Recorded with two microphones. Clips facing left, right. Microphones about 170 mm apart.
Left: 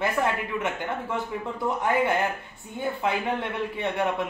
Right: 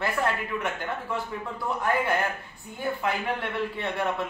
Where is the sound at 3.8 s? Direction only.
15° left (ahead or behind).